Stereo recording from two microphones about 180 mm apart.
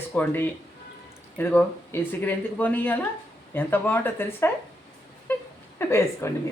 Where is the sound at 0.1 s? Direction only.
10° left (ahead or behind).